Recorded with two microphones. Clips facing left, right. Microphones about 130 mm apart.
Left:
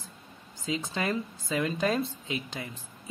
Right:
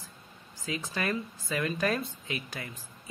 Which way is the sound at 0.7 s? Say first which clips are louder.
Left 2 dB; 25° left (ahead or behind).